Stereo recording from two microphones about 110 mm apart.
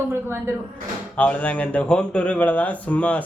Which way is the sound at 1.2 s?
15° left (ahead or behind).